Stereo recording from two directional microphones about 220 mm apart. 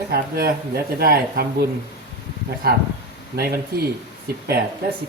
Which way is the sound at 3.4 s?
45° right (ahead or behind).